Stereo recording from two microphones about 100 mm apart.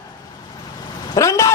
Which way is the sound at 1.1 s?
30° left (ahead or behind).